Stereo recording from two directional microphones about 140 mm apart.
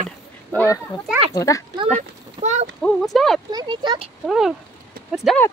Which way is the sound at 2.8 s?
5° left (ahead or behind).